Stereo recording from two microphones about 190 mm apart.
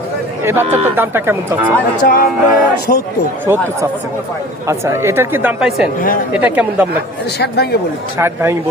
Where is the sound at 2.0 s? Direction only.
50° left (ahead or behind).